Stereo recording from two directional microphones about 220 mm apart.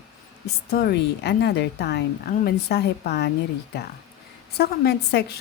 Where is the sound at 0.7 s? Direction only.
45° left (ahead or behind).